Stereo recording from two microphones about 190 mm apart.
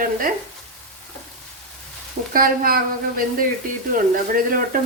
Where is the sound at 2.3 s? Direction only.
50° right (ahead or behind).